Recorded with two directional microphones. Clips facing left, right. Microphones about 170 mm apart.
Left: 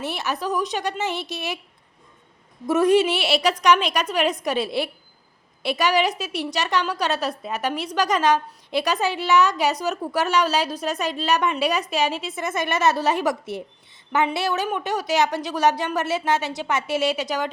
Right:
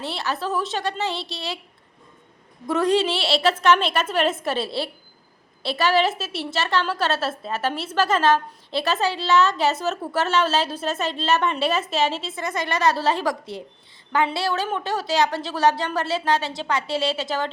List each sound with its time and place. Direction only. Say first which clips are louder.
0.0 s a woman's voice: left 1 dB; 20° left (ahead or behind)
2.6 s a woman's voice: left 3 dB; 20° left (ahead or behind)